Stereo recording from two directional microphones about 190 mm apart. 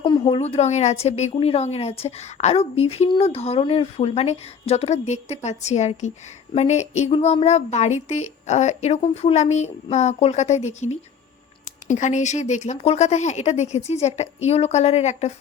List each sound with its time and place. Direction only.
0.0 s speech: 25° left (ahead or behind)